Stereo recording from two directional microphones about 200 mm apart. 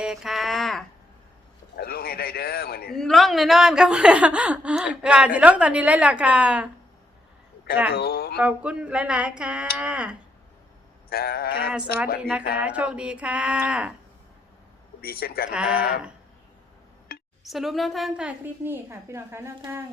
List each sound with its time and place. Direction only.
0.0 s a woman's voice: centre (ahead or behind)
1.7 s a man's voice: 50° left (ahead or behind)
2.9 s a woman's voice: centre (ahead or behind)
7.9 s speech: 50° left (ahead or behind)
8.4 s a woman's voice: 5° right (ahead or behind)
11.1 s a man's voice: 50° left (ahead or behind)
12.6 s a woman's voice: 5° right (ahead or behind)
15.0 s a man's voice: 50° left (ahead or behind)
15.5 s a woman's voice: 5° right (ahead or behind)
17.1 s a sound: 50° left (ahead or behind)
17.4 s a woman's voice: centre (ahead or behind)